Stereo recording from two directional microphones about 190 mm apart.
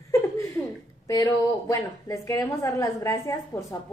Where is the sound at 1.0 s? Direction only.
15° left (ahead or behind).